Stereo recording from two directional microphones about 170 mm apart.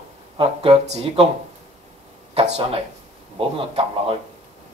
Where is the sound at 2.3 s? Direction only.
35° right (ahead or behind).